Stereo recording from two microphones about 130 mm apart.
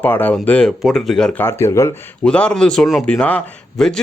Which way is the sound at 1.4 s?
20° left (ahead or behind).